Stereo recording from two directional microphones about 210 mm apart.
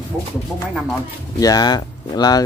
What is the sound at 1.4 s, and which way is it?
Speech, 20° left (ahead or behind).